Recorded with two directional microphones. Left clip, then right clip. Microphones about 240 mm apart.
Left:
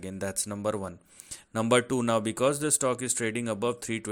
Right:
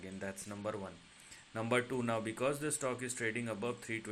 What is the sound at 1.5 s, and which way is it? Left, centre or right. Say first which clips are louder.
Speech: left 10 dB; left.